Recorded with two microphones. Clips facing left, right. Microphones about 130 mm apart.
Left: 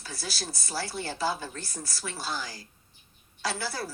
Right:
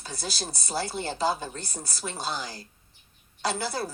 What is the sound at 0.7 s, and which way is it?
Speech, 20° right (ahead or behind).